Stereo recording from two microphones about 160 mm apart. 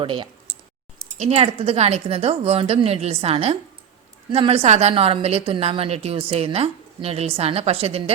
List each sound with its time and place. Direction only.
0.0 s a woman's voice: 30° right (ahead or behind)